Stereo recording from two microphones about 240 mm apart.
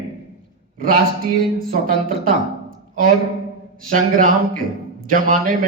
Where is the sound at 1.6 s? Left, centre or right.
Right.